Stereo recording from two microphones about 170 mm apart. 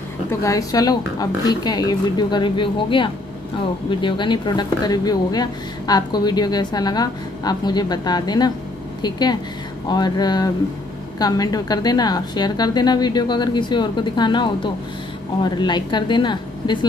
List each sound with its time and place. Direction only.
0.3 s speech: 20° left (ahead or behind)